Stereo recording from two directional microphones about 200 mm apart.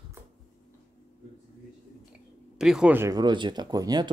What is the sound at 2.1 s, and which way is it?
Speech, 5° right (ahead or behind).